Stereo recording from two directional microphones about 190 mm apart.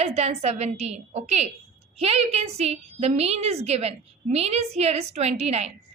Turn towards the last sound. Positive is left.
turn(degrees=-35)  # may be behind; listen again after turning